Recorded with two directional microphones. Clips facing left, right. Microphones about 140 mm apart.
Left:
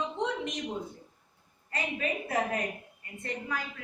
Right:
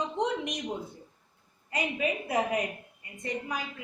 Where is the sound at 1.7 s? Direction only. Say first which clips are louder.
Right 3 dB; 15° right (ahead or behind).